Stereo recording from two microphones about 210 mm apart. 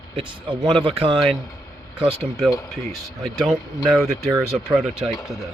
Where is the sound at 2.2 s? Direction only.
5° right (ahead or behind).